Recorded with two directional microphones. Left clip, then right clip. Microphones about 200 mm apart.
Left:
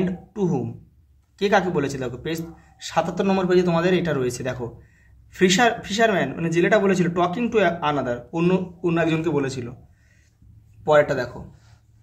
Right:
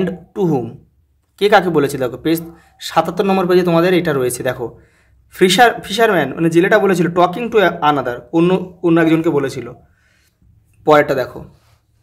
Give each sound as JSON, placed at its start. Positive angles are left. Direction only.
{"t": 0.0, "sound": "speech", "side_deg": -45}
{"t": 10.8, "sound": "a man's voice", "side_deg": -40}